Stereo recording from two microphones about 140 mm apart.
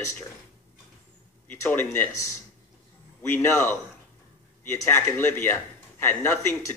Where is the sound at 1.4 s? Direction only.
15° left (ahead or behind).